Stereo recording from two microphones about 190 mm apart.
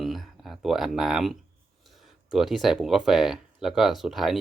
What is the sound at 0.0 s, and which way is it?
Speech, centre (ahead or behind).